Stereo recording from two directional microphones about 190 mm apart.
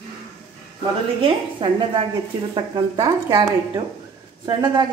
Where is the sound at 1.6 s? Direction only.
25° right (ahead or behind).